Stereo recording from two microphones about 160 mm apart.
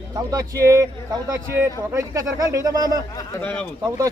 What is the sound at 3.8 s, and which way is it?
Speech, 20° right (ahead or behind).